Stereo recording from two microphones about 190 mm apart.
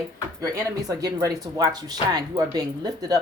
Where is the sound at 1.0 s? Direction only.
20° right (ahead or behind).